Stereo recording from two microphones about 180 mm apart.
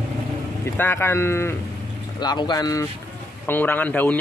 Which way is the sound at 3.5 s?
10° left (ahead or behind).